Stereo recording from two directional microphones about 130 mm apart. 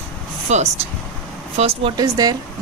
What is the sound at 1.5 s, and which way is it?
Speech, 50° right (ahead or behind).